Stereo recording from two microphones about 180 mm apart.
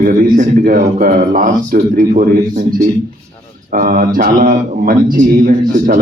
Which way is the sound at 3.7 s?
55° right (ahead or behind).